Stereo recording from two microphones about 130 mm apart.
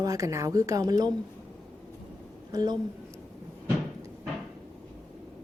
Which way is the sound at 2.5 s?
30° right (ahead or behind).